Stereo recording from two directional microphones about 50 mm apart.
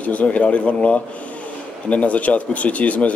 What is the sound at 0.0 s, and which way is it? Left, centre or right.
Speech, left.